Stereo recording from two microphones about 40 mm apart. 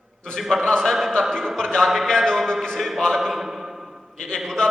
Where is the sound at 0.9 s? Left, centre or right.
Centre.